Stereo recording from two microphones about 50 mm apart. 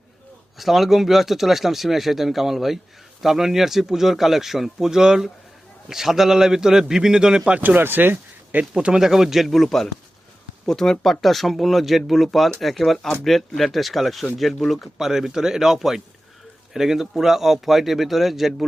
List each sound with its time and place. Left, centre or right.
0.6 s speech: centre
7.6 s speech: right
8.8 s speech: centre